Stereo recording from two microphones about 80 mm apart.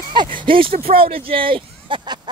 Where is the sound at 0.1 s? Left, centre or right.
Right.